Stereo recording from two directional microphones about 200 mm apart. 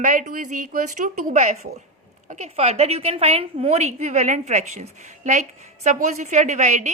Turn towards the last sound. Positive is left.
turn(degrees=-35)  # may be behind; listen again after turning